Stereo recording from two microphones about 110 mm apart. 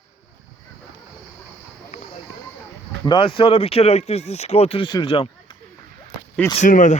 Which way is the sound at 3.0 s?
50° left (ahead or behind).